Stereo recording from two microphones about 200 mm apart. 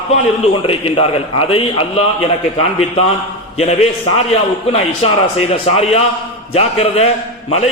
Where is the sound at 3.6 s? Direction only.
30° left (ahead or behind).